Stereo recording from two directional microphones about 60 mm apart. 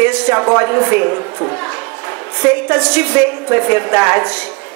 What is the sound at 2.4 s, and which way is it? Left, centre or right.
A woman's voice, right.